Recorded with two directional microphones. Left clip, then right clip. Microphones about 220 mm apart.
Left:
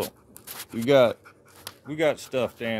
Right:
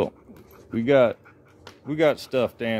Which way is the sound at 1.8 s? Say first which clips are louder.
Right 3 dB; 20° right (ahead or behind).